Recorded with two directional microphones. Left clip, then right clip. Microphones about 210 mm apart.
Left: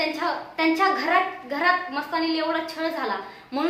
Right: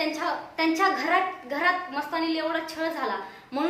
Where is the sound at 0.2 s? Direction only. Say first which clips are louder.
Left 2 dB; 10° right (ahead or behind).